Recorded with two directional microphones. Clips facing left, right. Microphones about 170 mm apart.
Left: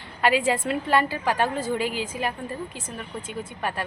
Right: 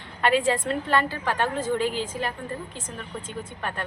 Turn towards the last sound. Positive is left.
turn(degrees=5)  # may be behind; listen again after turning